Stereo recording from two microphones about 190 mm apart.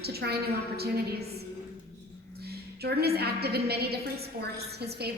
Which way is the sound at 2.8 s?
55° right (ahead or behind).